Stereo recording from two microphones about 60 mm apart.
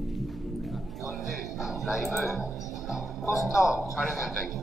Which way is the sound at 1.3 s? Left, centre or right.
Centre.